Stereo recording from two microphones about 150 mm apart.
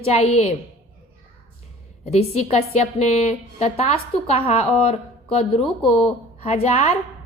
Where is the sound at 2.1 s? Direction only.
45° left (ahead or behind).